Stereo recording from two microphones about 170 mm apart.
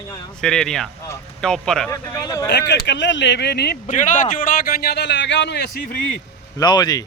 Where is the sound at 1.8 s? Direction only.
15° left (ahead or behind).